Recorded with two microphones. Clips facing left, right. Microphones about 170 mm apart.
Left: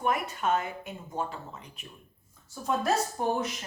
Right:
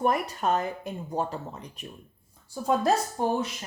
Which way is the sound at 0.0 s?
35° right (ahead or behind).